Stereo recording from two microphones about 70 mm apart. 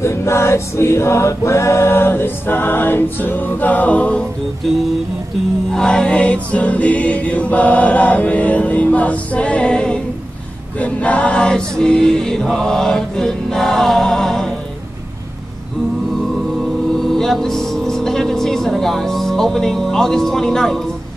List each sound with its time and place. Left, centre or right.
0.0 s choir: left; by 4.3 s centre
4.6 s music: centre
10.8 s choir: centre
16.9 s music: centre